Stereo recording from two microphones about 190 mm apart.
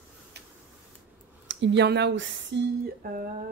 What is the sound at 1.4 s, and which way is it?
Speech, 70° right (ahead or behind).